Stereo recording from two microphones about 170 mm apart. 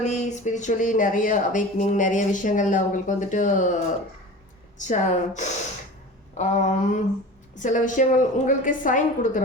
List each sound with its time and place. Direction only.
0.0 s a woman's voice: 40° left (ahead or behind)
4.8 s a woman's voice: 45° left (ahead or behind)
6.3 s a sound: 45° left (ahead or behind)
7.5 s a woman's voice: 50° left (ahead or behind)